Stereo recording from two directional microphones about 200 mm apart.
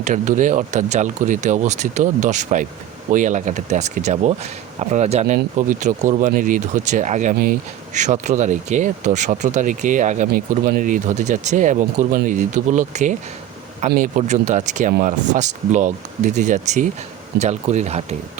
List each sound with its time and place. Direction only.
0.0 s speech: 40° right (ahead or behind)